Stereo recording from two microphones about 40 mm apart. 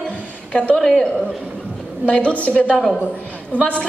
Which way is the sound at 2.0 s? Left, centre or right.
Left.